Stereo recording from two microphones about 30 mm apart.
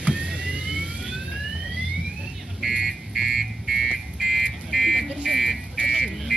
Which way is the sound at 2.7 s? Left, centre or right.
Centre.